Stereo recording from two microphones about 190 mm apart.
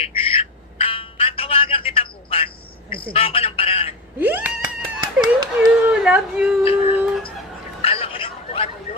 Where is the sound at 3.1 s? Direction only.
30° left (ahead or behind).